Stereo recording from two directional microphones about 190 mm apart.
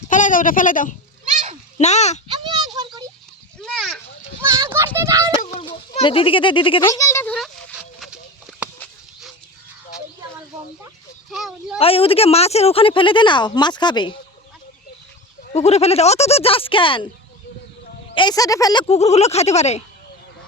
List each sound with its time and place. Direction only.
0.1 s a child's voice: 45° left (ahead or behind)
1.3 s a sound: 40° right (ahead or behind)
1.8 s speech: 35° left (ahead or behind)
2.2 s a sound: 25° right (ahead or behind)
3.6 s a sound: centre (ahead or behind)
4.4 s children playing: 15° right (ahead or behind)
4.9 s a child's voice: 15° right (ahead or behind)
6.0 s a woman's voice: 25° left (ahead or behind)
8.0 s chicken: centre (ahead or behind)
11.3 s speech: centre (ahead or behind)
11.8 s a woman's voice: 30° left (ahead or behind)
15.5 s speech: 35° left (ahead or behind)
18.1 s speech: 25° left (ahead or behind)